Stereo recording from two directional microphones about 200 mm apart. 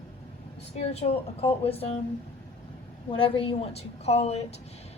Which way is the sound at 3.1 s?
25° left (ahead or behind).